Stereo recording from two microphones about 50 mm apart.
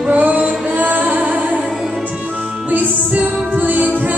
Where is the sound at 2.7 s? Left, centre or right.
Right.